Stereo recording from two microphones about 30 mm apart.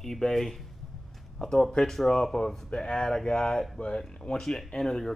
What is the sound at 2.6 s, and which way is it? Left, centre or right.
Speech, left.